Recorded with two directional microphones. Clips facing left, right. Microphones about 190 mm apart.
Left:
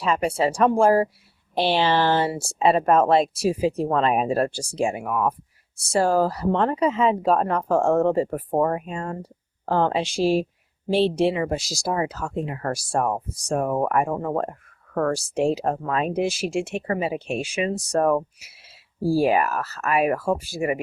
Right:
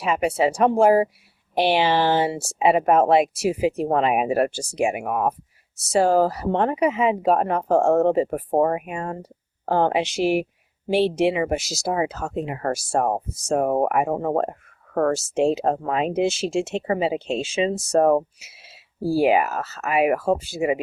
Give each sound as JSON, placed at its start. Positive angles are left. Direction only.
{"t": 0.0, "sound": "speech", "side_deg": -15}
{"t": 18.3, "sound": "a sound", "side_deg": -20}
{"t": 19.1, "sound": "speech", "side_deg": -20}